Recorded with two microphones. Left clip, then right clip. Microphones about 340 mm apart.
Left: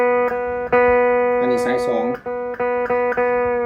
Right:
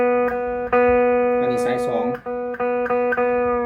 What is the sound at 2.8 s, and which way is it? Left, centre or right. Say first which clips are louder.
Music: left 1 dB; left.